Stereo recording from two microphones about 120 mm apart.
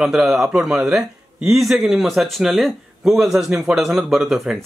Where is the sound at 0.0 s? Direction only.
Centre (ahead or behind).